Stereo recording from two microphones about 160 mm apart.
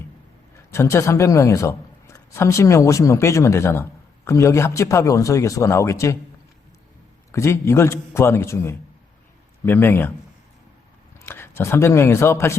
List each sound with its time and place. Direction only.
0.7 s a man's voice: 15° left (ahead or behind)
7.3 s a man's voice: 15° left (ahead or behind)
11.3 s speech: 15° left (ahead or behind)